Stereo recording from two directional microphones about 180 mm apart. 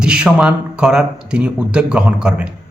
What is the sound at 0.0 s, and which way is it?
Speech, 5° right (ahead or behind).